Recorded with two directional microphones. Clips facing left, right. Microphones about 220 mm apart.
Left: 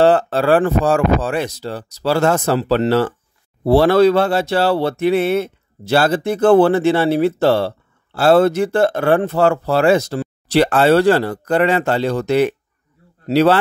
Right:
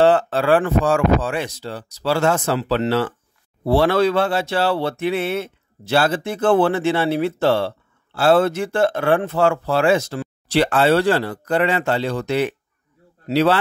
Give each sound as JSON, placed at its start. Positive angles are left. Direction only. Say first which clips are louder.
{"t": 0.0, "sound": "a man's voice", "louder": "left 2 dB", "side_deg": 40}